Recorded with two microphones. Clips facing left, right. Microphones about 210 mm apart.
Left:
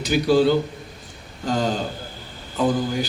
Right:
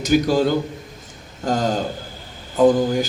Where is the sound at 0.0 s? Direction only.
45° right (ahead or behind).